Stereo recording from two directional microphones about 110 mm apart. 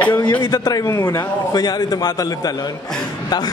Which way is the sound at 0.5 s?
30° left (ahead or behind).